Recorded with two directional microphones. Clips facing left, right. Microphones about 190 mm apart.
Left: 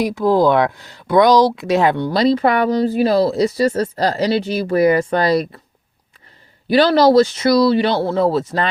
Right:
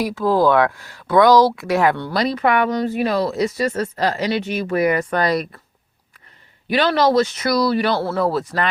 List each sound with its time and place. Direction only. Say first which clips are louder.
0.0 s speech: left 2 dB; 15° left (ahead or behind)
6.7 s speech: left 5 dB; 35° left (ahead or behind)